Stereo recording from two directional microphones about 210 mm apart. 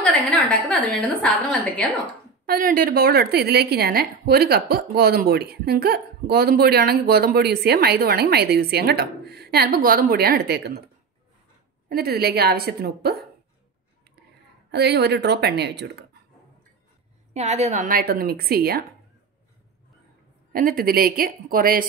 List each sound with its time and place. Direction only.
0.0 s a woman's voice: 5° left (ahead or behind)
2.4 s a woman's voice: 45° right (ahead or behind)
11.9 s a woman's voice: 45° right (ahead or behind)
14.7 s a woman's voice: 50° right (ahead or behind)
17.3 s a woman's voice: 30° right (ahead or behind); by 18.9 s 45° right (ahead or behind)
20.5 s a woman's voice: 45° right (ahead or behind)